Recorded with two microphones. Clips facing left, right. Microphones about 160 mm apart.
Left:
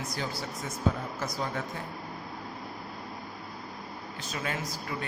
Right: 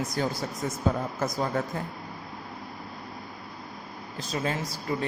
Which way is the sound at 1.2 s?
50° right (ahead or behind).